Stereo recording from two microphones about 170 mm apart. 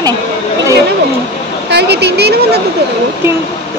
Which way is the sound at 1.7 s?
80° right.